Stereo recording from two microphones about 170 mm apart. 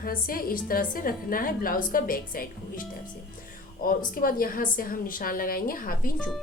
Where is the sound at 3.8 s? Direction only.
55° left (ahead or behind).